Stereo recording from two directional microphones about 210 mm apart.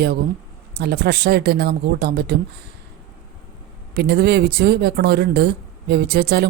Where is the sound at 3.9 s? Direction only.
50° right (ahead or behind).